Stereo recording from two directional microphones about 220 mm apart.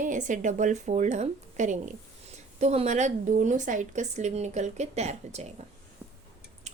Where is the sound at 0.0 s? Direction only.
35° right (ahead or behind).